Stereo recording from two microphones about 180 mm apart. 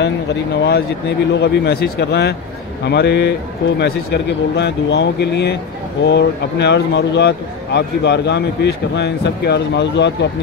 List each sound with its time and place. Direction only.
0.0 s speech: 70° left (ahead or behind)